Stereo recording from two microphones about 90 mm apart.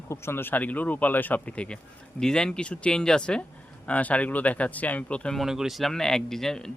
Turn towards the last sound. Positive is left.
turn(degrees=5)  # may be behind; listen again after turning